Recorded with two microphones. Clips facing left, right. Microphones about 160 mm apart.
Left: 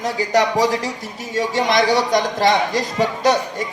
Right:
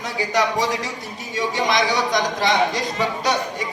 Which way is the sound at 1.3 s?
45° left (ahead or behind).